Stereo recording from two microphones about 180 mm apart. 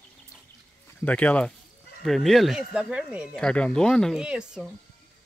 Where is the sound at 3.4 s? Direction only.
5° left (ahead or behind).